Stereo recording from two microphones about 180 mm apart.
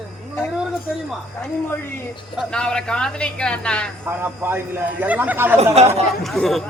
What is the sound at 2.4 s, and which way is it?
Speech, 5° left (ahead or behind).